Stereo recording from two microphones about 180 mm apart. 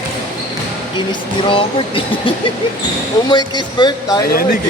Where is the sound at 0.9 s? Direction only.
25° left (ahead or behind).